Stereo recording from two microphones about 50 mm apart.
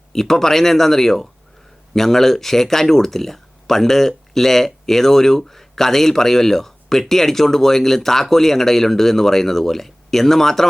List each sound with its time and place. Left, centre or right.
0.1 s speech: centre